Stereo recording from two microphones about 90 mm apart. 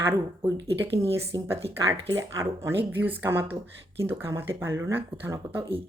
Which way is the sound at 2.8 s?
20° right (ahead or behind).